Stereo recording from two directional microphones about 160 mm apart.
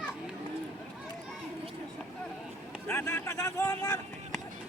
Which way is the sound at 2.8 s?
15° left (ahead or behind).